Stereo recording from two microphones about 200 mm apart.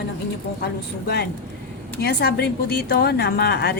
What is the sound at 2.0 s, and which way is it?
A woman's voice, 50° left (ahead or behind).